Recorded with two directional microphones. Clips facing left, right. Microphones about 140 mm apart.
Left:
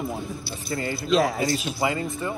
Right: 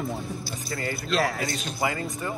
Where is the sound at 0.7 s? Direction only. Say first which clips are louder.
Left 3 dB; 25° left (ahead or behind).